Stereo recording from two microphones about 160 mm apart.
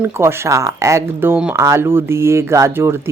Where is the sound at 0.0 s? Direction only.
15° right (ahead or behind).